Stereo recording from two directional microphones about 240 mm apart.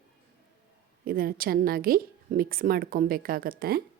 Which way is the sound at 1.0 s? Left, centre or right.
Right.